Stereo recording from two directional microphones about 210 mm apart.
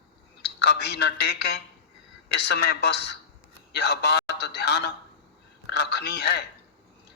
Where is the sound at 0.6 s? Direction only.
50° left (ahead or behind).